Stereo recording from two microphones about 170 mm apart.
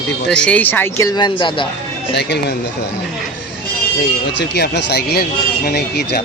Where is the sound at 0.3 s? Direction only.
5° left (ahead or behind); by 1.6 s 30° left (ahead or behind).